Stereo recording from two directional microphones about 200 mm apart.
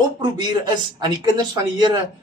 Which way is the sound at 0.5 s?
20° right (ahead or behind).